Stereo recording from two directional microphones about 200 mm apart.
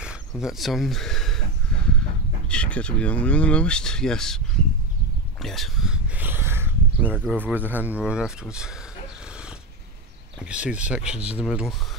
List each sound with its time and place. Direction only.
0.0 s speech: 5° right (ahead or behind)
2.5 s speech: 5° left (ahead or behind)
5.4 s speech: centre (ahead or behind)
10.4 s speech: 5° right (ahead or behind)